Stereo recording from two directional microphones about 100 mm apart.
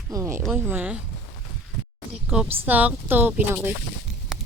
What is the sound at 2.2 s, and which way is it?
A woman's voice, 10° right (ahead or behind).